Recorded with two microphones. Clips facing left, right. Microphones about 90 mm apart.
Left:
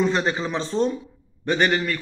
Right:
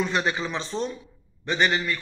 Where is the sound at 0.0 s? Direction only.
30° left (ahead or behind).